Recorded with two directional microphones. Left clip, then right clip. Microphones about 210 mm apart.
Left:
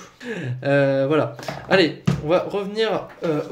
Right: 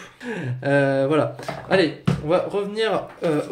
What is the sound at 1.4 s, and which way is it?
Speech, 20° left (ahead or behind).